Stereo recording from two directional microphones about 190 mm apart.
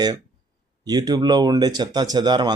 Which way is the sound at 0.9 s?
20° right (ahead or behind).